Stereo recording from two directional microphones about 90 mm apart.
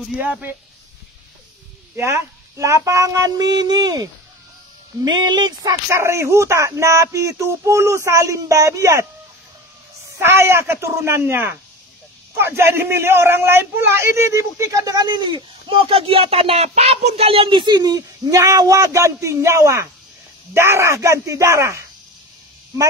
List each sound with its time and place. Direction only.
2.0 s speech: 35° right (ahead or behind); by 5.8 s 50° right (ahead or behind)
5.9 s speech: 30° right (ahead or behind)
10.1 s speech: 30° right (ahead or behind)
15.0 s speech: 55° right (ahead or behind)
15.7 s speech: 90° right
17.6 s speech: 50° right (ahead or behind)